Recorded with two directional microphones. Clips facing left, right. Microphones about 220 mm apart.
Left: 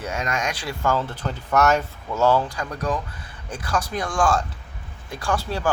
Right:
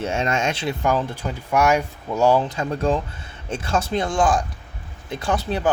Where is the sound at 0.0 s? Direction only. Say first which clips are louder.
Right 4 dB; 25° right (ahead or behind).